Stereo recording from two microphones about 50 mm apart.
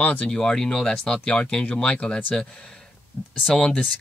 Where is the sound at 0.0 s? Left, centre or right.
Left.